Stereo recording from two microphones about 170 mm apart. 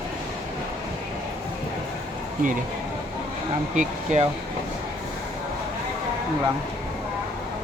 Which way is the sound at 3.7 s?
45° right (ahead or behind).